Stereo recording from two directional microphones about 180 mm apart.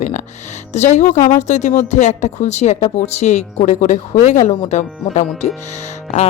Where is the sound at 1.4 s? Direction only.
40° left (ahead or behind).